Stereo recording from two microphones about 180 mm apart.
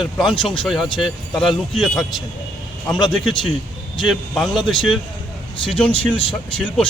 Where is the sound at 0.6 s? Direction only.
Centre (ahead or behind).